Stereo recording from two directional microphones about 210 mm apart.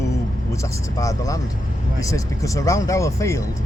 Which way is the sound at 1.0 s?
15° left (ahead or behind).